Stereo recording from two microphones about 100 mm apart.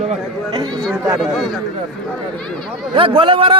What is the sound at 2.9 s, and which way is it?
Speech, 60° right (ahead or behind).